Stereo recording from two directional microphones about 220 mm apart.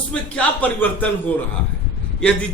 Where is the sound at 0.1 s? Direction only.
5° left (ahead or behind).